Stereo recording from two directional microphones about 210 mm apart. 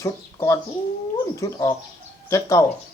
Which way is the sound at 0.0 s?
15° left (ahead or behind).